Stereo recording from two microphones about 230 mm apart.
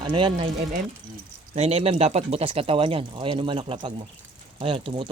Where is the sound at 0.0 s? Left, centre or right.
Right.